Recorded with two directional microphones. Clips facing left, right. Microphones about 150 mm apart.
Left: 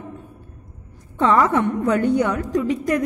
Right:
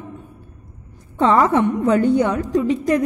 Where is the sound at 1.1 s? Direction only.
30° right (ahead or behind).